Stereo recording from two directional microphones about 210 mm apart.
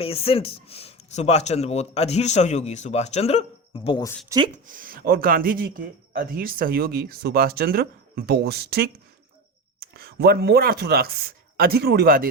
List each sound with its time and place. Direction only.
0.0 s speech: 25° left (ahead or behind)
4.5 s speech: 40° right (ahead or behind)
9.9 s speech: 50° right (ahead or behind)